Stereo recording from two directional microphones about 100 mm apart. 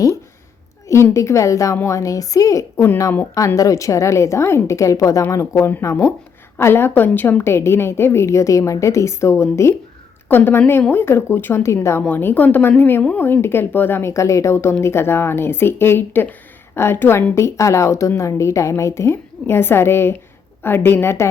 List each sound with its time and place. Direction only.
0.9 s a woman's voice: 30° left (ahead or behind)
12.0 s speech: 20° left (ahead or behind)